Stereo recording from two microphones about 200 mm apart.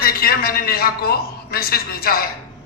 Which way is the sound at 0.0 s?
50° left (ahead or behind).